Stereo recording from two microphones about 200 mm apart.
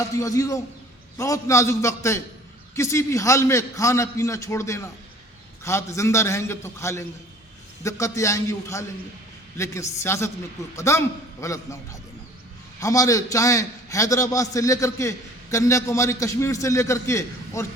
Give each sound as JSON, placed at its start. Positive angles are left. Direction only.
{"t": 0.1, "sound": "a man's voice", "side_deg": 15}